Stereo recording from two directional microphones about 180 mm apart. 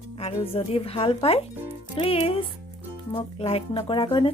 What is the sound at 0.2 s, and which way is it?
Speech, 30° left (ahead or behind).